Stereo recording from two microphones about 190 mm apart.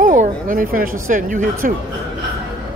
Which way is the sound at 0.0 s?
45° right (ahead or behind).